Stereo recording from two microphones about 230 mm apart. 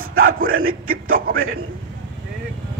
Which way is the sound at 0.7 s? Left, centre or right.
Right.